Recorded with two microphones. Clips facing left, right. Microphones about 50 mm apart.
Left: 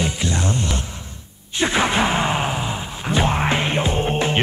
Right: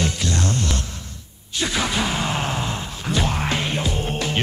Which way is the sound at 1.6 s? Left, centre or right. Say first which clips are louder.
Left 5 dB; left.